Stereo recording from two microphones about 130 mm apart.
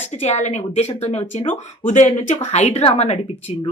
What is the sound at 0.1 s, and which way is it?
A woman's voice, 60° left (ahead or behind).